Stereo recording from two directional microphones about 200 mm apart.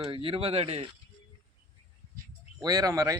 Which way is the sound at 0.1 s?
25° right (ahead or behind).